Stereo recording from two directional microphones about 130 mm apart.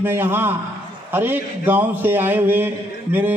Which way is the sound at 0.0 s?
15° right (ahead or behind).